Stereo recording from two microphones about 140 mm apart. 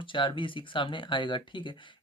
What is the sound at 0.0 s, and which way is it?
Speech, 35° left (ahead or behind).